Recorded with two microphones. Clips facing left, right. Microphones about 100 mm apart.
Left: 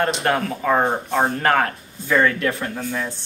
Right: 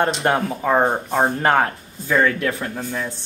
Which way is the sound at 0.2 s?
25° right (ahead or behind).